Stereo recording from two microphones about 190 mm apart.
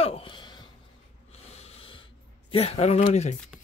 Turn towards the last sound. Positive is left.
turn(degrees=40)  # may be behind; listen again after turning